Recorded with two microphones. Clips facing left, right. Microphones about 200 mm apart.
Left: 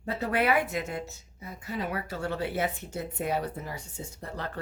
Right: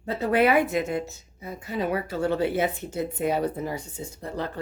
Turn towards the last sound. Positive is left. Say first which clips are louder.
# right 5 dB
turn(degrees=-15)  # may be behind; listen again after turning